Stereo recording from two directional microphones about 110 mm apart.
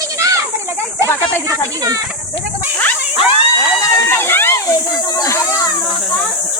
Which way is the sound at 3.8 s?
30° left (ahead or behind).